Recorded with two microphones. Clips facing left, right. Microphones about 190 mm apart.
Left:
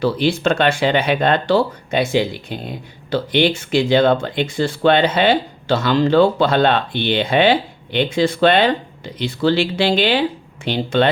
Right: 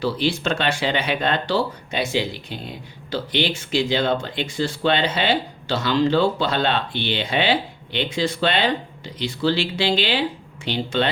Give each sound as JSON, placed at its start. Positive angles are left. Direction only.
{"t": 0.0, "sound": "speech", "side_deg": 55}